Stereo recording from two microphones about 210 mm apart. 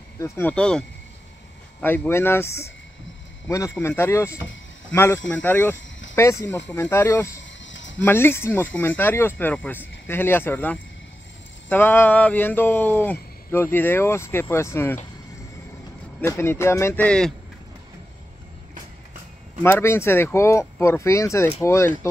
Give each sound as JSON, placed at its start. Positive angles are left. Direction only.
{"t": 0.2, "sound": "speech", "side_deg": 10}
{"t": 7.4, "sound": "a sound", "side_deg": 60}
{"t": 8.0, "sound": "speech", "side_deg": 10}
{"t": 16.2, "sound": "speech", "side_deg": 10}
{"t": 19.6, "sound": "speech", "side_deg": 10}